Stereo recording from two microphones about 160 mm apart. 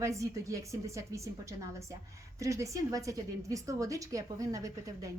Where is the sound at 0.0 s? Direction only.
20° right (ahead or behind).